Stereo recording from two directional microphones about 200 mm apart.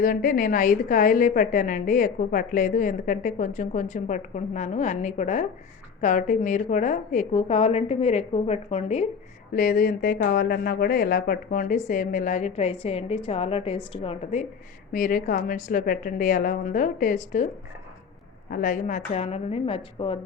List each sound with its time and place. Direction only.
0.0 s a woman's voice: 45° left (ahead or behind)
9.5 s a woman's voice: 45° left (ahead or behind)
14.9 s a woman's voice: 45° left (ahead or behind)
18.5 s a woman's voice: 40° left (ahead or behind)